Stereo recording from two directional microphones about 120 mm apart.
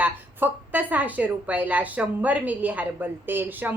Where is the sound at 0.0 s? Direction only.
15° right (ahead or behind).